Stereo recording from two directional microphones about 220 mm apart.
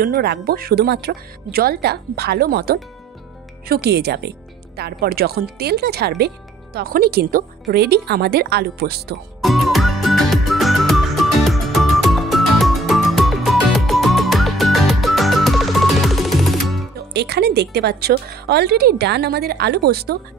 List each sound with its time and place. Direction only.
0.0 s speech: 45° right (ahead or behind)
9.4 s music: centre (ahead or behind)
17.1 s speech: 50° right (ahead or behind)